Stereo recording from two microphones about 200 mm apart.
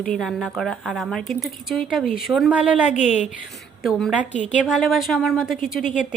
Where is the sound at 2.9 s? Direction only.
35° left (ahead or behind).